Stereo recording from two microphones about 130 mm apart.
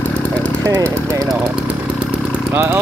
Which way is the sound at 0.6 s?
25° right (ahead or behind).